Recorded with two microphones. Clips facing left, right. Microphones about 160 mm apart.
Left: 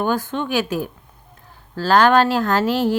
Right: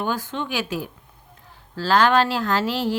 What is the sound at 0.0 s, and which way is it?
Speech, 50° left (ahead or behind).